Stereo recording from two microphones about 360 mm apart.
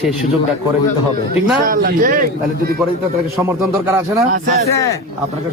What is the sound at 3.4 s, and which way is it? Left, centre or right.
Speech, centre.